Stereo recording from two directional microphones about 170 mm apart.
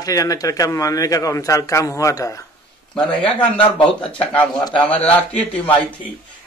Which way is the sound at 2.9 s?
5° left (ahead or behind).